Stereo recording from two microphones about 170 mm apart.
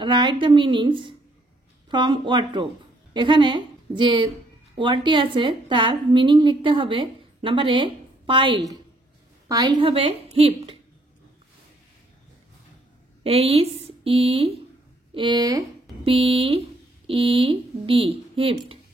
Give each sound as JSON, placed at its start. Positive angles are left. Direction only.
{"t": 0.0, "sound": "a woman's voice", "side_deg": -30}
{"t": 13.2, "sound": "speech", "side_deg": -35}